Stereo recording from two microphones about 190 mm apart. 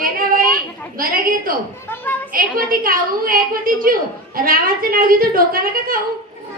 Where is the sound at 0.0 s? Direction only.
50° right (ahead or behind).